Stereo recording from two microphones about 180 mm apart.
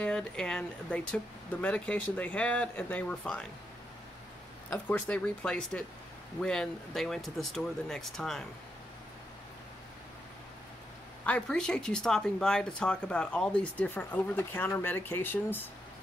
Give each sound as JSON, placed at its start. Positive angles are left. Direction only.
{"t": 0.0, "sound": "speech", "side_deg": 5}
{"t": 4.6, "sound": "speech", "side_deg": 10}
{"t": 11.2, "sound": "speech", "side_deg": 5}